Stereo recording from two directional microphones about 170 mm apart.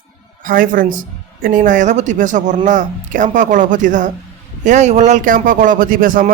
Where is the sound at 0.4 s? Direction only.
55° right (ahead or behind).